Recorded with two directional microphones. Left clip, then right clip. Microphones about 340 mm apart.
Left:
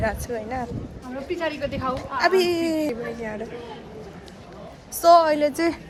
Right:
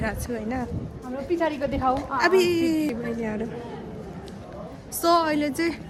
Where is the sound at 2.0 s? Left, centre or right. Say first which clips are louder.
Left 3 dB; centre.